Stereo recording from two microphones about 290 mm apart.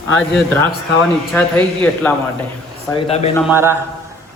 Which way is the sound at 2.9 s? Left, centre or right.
Left.